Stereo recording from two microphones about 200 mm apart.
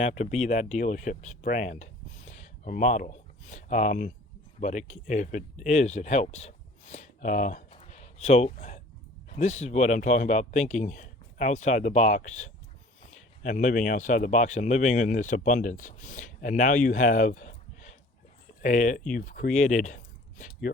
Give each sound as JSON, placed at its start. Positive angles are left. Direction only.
{"t": 0.0, "sound": "speech", "side_deg": 35}